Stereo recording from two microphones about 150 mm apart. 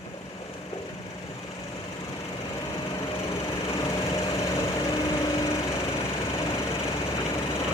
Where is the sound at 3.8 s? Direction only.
25° left (ahead or behind).